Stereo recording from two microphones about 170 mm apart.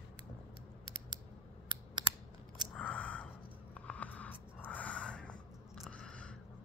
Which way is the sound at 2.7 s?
10° left (ahead or behind).